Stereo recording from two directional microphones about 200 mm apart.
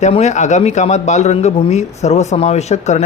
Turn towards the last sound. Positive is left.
turn(degrees=35)  # may be behind; listen again after turning